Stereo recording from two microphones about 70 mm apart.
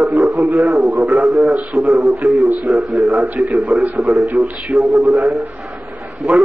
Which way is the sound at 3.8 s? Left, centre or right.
Right.